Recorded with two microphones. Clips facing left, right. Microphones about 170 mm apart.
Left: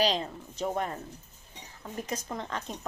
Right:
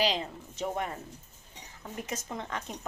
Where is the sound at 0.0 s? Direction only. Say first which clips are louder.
Left 2 dB; 40° left (ahead or behind).